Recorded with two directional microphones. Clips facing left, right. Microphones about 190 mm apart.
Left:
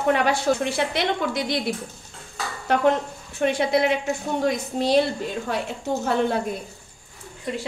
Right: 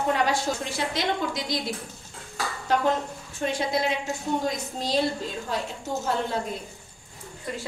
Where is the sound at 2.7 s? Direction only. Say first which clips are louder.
Left 4 dB; 65° left (ahead or behind).